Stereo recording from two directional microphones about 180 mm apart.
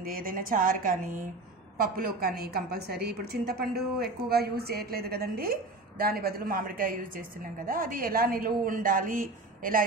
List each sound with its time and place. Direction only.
0.0 s a woman's voice: 55° right (ahead or behind)